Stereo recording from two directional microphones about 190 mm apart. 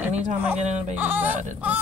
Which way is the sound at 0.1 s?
40° right (ahead or behind).